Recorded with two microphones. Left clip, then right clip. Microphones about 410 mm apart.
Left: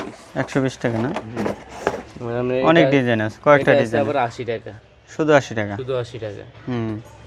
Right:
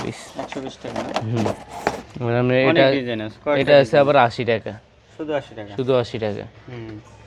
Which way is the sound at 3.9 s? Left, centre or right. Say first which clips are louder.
Right 5 dB; right.